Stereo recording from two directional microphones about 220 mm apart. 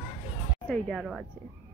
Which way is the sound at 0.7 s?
Centre (ahead or behind).